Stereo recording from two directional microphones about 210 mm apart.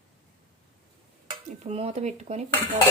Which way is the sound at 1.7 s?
30° right (ahead or behind).